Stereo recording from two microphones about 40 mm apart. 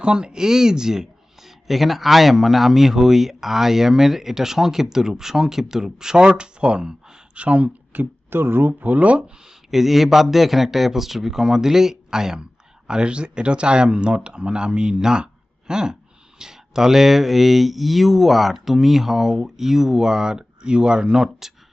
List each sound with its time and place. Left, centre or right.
0.0 s speech: right
7.3 s speech: right
7.9 s speech: right
8.8 s speech: right
9.2 s speech: centre
15.2 s a sound: centre
16.4 s speech: centre